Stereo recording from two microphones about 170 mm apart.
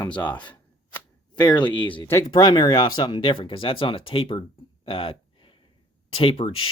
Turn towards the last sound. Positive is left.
turn(degrees=35)  # may be behind; listen again after turning